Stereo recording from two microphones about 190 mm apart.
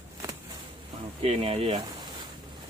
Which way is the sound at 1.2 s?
30° right (ahead or behind).